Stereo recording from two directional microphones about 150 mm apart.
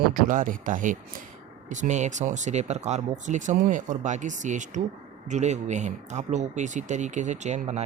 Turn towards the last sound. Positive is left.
turn(degrees=-45)  # may be behind; listen again after turning